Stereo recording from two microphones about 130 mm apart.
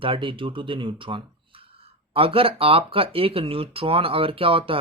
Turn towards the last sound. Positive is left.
turn(degrees=-45)  # may be behind; listen again after turning